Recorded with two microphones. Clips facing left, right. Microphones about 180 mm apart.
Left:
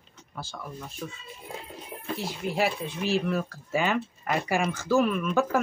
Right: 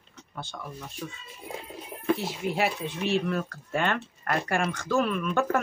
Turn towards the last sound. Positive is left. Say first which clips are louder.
# left 2 dB
turn(degrees=5)  # may be behind; listen again after turning